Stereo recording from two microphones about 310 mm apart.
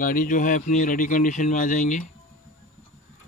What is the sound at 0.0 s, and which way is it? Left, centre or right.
Speech, left.